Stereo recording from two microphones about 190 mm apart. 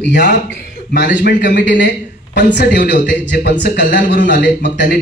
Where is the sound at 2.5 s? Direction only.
65° left (ahead or behind).